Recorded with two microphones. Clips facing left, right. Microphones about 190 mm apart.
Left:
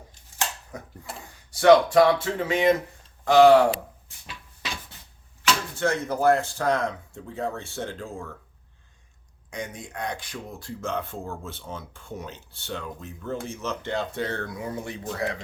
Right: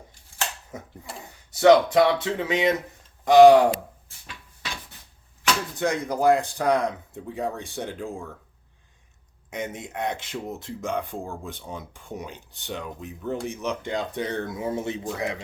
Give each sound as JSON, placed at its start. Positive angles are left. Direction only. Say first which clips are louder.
{"t": 1.5, "sound": "speech", "louder": "even", "side_deg": -20}
{"t": 5.7, "sound": "speech", "louder": "even", "side_deg": -15}
{"t": 9.5, "sound": "speech", "louder": "right 3 dB", "side_deg": -20}